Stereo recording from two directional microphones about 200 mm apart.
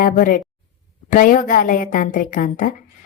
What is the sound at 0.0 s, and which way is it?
A woman's voice, 45° left (ahead or behind).